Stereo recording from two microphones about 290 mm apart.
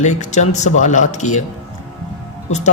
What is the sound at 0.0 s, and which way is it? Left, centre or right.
Speech, left.